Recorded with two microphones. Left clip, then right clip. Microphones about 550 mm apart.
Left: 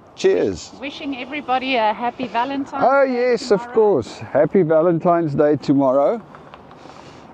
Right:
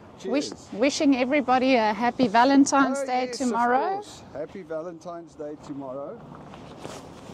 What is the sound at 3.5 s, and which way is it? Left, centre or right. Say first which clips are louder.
Speech: left 3 dB; left.